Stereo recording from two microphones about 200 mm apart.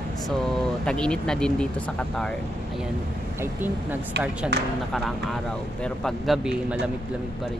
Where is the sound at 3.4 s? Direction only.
10° right (ahead or behind).